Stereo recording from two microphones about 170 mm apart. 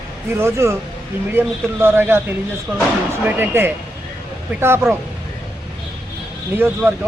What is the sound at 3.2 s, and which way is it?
Speech, 10° right (ahead or behind).